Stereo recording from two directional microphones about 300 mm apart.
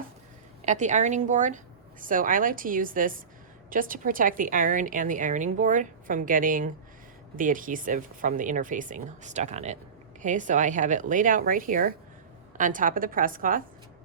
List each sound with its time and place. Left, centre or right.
0.6 s a woman's voice: right